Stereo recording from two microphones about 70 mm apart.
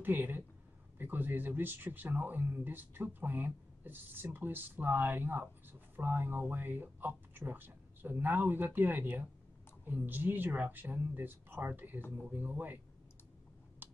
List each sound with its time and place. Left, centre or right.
0.0 s speech: right
13.8 s typing: right